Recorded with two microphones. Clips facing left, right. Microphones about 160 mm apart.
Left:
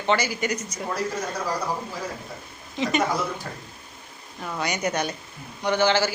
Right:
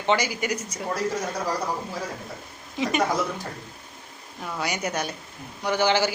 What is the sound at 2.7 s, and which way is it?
Speech, 5° right (ahead or behind).